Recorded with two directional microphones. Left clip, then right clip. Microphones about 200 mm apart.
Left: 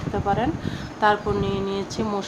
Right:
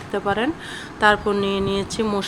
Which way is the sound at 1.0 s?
15° right (ahead or behind).